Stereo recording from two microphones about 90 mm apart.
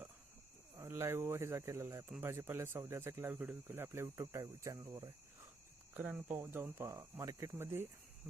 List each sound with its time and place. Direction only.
0.9 s speech: 25° right (ahead or behind)
3.3 s speech: 15° right (ahead or behind); by 5.1 s 35° right (ahead or behind)
5.9 s speech: 15° right (ahead or behind)
6.7 s speech: 35° right (ahead or behind)